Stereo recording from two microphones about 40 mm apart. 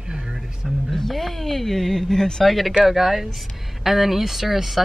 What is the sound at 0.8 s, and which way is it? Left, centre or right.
Speech, centre.